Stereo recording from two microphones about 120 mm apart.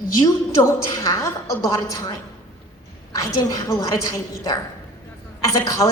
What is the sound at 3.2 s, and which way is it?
A woman's voice, 30° left (ahead or behind).